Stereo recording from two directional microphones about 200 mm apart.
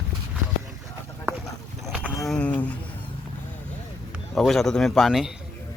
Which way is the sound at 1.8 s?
Centre (ahead or behind).